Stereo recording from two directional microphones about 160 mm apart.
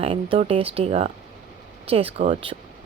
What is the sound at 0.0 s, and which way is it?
A woman's voice, 40° right (ahead or behind).